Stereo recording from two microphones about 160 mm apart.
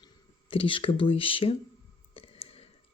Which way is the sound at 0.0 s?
35° left (ahead or behind).